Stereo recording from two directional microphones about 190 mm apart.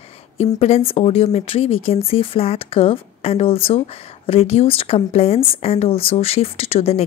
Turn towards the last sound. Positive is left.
turn(degrees=30)  # may be behind; listen again after turning